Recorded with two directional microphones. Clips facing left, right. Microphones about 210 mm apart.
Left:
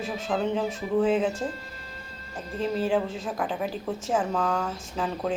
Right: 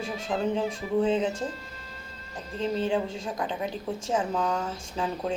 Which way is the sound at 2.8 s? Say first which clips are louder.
Left 3 dB; 5° left (ahead or behind).